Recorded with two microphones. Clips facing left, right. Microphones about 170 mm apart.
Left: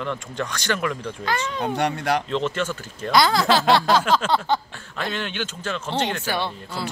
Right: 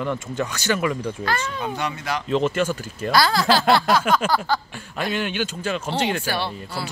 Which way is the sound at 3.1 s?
20° left (ahead or behind).